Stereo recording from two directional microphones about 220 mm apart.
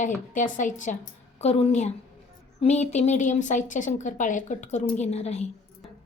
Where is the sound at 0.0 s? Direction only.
35° left (ahead or behind).